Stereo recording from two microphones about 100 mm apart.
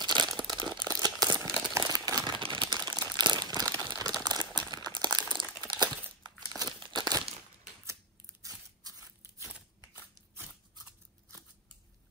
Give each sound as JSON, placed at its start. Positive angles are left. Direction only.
{"t": 0.0, "sound": "crumpling", "side_deg": -50}
{"t": 2.8, "sound": "crumpling", "side_deg": -45}
{"t": 7.8, "sound": "scissors", "side_deg": -35}